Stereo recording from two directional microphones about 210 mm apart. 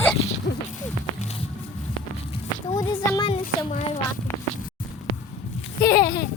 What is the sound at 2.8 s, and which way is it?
Speech, 20° left (ahead or behind).